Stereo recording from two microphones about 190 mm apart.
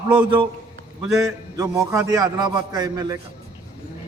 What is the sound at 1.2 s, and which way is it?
A man's voice, 20° right (ahead or behind).